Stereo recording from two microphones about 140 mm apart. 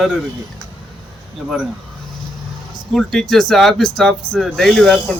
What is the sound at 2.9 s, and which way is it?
Speech, centre (ahead or behind).